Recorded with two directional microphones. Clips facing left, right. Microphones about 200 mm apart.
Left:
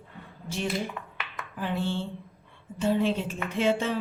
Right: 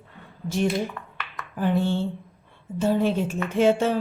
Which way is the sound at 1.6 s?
45° right (ahead or behind).